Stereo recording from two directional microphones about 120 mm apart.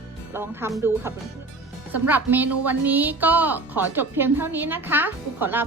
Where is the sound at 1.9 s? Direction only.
15° right (ahead or behind).